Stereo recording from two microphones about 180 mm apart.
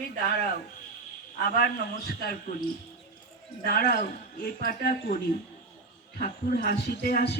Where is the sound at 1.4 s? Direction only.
55° left (ahead or behind).